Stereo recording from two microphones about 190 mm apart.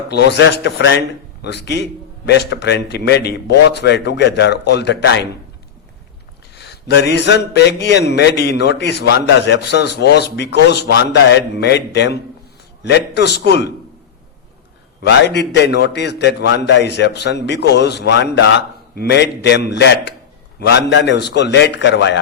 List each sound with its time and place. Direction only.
0.1 s a man's voice: 60° left (ahead or behind)
6.6 s speech: 60° left (ahead or behind)
15.0 s speech: 65° left (ahead or behind)